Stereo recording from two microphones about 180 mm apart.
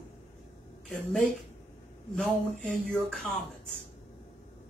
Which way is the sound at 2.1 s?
5° left (ahead or behind).